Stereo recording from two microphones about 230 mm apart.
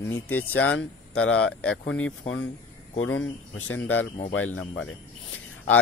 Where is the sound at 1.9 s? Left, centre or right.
Left.